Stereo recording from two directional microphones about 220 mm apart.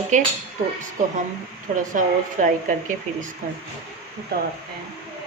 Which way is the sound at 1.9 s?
35° right (ahead or behind).